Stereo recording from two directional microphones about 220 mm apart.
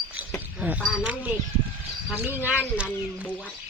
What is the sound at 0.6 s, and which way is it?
Speech, 5° right (ahead or behind).